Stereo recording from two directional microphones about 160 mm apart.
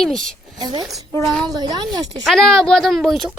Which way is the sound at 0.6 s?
25° right (ahead or behind).